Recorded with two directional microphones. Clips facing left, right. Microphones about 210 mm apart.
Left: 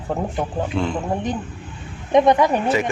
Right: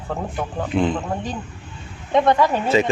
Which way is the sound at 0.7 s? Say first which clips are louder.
Right 4 dB; 20° right (ahead or behind).